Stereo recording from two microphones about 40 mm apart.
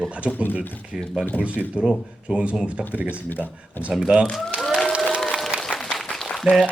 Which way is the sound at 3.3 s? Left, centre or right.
Left.